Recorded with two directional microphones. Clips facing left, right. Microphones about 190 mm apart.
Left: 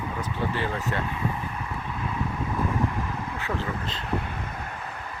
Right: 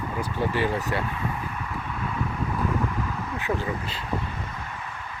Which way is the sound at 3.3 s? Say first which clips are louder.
Right 4 dB; 15° right (ahead or behind).